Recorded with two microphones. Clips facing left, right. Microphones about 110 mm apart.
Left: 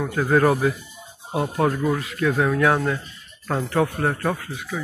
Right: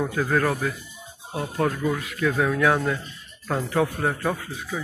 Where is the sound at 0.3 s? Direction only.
15° left (ahead or behind).